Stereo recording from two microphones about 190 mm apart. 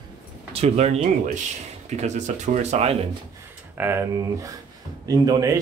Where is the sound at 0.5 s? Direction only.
35° right (ahead or behind).